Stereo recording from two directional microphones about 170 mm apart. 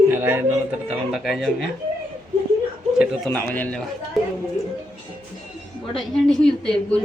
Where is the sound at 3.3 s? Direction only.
10° left (ahead or behind).